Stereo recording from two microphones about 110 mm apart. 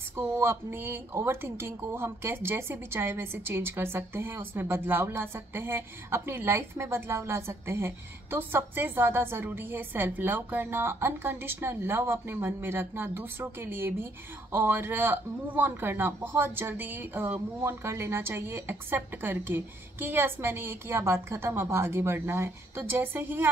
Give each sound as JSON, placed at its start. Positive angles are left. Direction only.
{"t": 0.1, "sound": "speech", "side_deg": -20}